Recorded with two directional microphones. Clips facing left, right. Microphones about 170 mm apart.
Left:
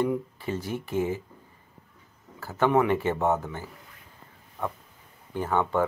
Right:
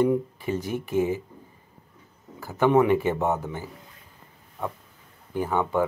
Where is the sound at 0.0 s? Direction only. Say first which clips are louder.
Right 4 dB; 20° right (ahead or behind).